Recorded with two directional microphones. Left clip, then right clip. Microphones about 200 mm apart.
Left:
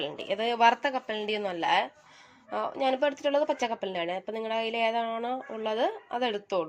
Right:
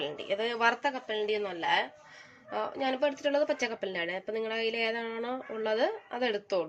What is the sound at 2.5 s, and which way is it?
Speech, 20° left (ahead or behind).